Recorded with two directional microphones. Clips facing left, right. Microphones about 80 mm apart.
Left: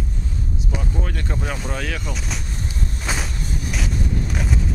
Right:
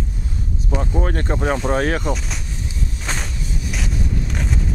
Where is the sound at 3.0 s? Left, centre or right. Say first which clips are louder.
Left 1 dB; centre.